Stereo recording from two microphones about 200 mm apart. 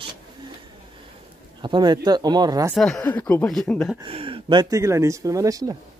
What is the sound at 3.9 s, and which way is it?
Speech, 25° right (ahead or behind).